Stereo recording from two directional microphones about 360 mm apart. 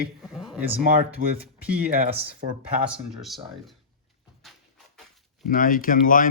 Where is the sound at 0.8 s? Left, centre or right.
Right.